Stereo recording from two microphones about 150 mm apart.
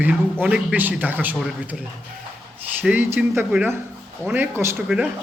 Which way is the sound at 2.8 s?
10° right (ahead or behind).